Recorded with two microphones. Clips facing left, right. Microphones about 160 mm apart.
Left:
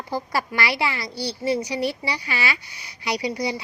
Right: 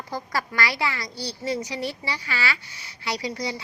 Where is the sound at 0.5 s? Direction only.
20° left (ahead or behind).